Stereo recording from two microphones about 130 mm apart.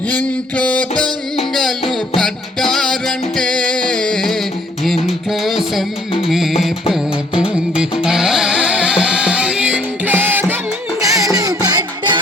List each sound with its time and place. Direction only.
0.1 s a sound: 10° left (ahead or behind)
2.1 s music: centre (ahead or behind)
7.8 s music: 5° right (ahead or behind)
11.0 s music: 25° right (ahead or behind)